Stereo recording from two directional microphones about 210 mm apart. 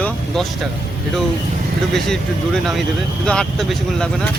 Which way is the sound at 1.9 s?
Centre (ahead or behind).